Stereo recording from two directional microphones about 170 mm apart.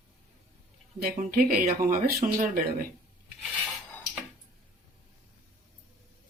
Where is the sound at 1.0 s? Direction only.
60° right (ahead or behind).